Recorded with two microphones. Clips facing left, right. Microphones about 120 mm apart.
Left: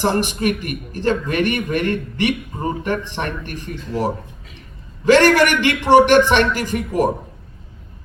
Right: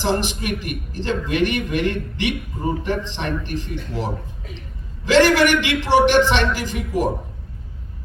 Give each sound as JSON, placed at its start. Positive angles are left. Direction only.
{"t": 0.0, "sound": "a man's voice", "side_deg": 50}
{"t": 5.0, "sound": "a man's voice", "side_deg": 50}